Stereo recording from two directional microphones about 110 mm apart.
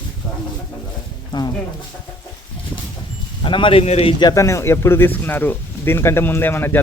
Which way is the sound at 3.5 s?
50° left (ahead or behind).